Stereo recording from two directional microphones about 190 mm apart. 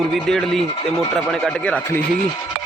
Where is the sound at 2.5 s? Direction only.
50° right (ahead or behind).